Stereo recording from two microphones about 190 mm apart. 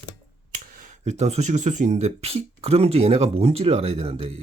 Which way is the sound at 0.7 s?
45° right (ahead or behind).